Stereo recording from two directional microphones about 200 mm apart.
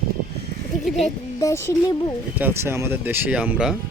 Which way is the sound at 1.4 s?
15° left (ahead or behind).